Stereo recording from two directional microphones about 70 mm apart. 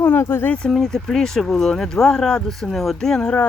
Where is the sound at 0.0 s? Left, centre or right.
Left.